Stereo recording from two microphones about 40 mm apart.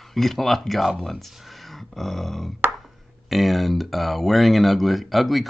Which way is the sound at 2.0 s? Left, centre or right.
Centre.